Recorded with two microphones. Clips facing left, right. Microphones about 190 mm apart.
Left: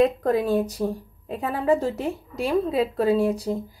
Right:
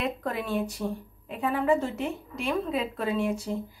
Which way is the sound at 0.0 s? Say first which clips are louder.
Left 11 dB; 40° left (ahead or behind).